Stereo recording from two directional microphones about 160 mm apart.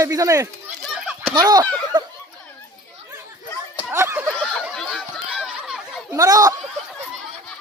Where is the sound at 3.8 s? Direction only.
15° right (ahead or behind).